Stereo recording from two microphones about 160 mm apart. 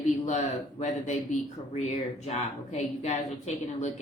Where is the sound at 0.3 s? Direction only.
45° left (ahead or behind).